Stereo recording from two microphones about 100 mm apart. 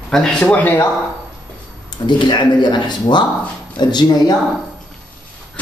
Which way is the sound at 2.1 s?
50° left (ahead or behind).